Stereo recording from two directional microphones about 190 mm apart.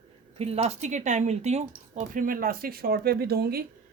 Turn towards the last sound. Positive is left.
turn(degrees=-55)  # may be behind; listen again after turning